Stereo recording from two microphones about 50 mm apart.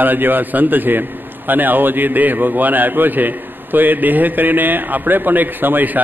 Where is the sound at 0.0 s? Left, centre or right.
Right.